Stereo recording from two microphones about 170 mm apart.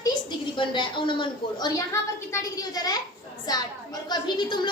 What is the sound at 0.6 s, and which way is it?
A woman's voice, 30° left (ahead or behind).